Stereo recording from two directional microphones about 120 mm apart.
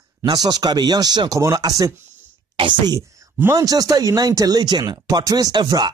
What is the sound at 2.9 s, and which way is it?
Speech, 25° right (ahead or behind).